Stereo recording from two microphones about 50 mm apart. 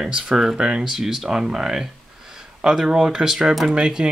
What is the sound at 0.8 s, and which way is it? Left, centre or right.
Speech, centre.